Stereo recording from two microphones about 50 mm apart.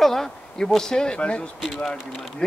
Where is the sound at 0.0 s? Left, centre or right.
Centre.